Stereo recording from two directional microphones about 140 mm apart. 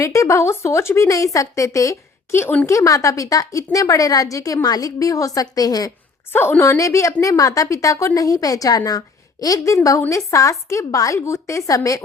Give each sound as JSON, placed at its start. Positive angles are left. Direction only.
{"t": 0.0, "sound": "a woman's voice", "side_deg": 20}
{"t": 6.3, "sound": "a woman's voice", "side_deg": 15}